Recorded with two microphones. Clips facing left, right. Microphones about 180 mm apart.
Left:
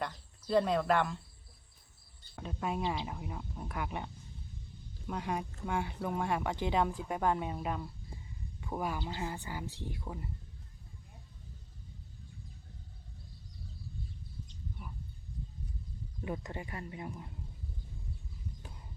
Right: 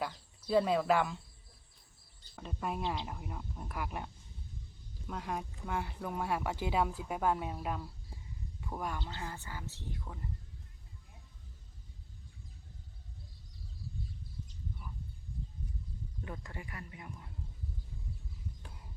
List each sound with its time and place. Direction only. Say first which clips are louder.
0.0 s speech: even; 5° right (ahead or behind)
2.3 s speech: left 2 dB; centre (ahead or behind)
16.2 s speech: left 7 dB; 20° left (ahead or behind)